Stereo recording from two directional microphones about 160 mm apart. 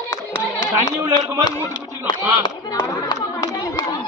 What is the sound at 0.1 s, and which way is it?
Speech, 25° left (ahead or behind).